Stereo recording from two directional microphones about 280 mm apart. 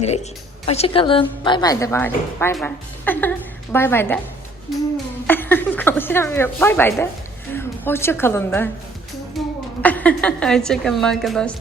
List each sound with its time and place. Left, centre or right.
0.0 s a woman's voice: left; by 4.2 s centre
5.2 s a woman's voice: centre
9.4 s a sound: centre
9.8 s a woman's voice: centre